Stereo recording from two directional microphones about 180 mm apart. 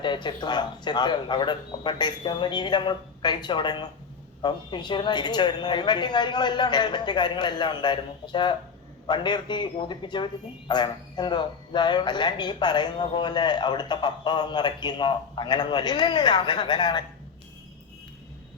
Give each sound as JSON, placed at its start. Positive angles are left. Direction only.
{"t": 0.0, "sound": "speech", "side_deg": 25}